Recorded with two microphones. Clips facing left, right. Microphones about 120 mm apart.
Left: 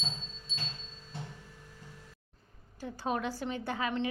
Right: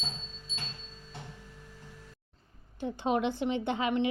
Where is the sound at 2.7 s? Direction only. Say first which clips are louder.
Right 5 dB; 25° right (ahead or behind).